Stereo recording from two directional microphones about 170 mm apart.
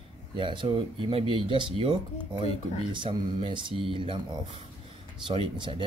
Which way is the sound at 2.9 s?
30° right (ahead or behind).